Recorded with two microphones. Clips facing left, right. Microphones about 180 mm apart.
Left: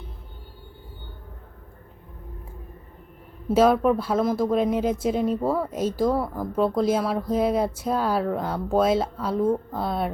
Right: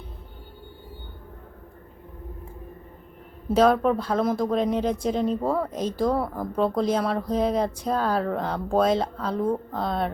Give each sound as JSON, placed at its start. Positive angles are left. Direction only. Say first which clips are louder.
{"t": 3.5, "sound": "speech", "louder": "left 1 dB", "side_deg": 5}